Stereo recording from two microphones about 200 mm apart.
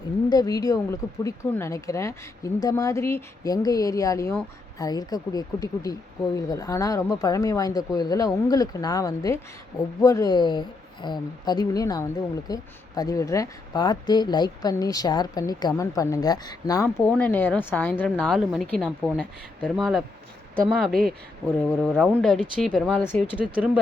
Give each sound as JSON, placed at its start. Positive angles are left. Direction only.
{"t": 0.3, "sound": "speech", "side_deg": 20}
{"t": 21.8, "sound": "speech", "side_deg": -5}
{"t": 23.4, "sound": "speech", "side_deg": -5}